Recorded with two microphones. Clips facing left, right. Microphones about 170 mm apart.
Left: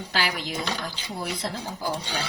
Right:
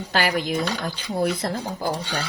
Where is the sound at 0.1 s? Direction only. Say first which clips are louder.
Right 7 dB; 55° right (ahead or behind).